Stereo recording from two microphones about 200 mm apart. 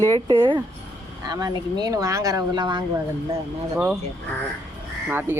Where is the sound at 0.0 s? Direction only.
20° right (ahead or behind).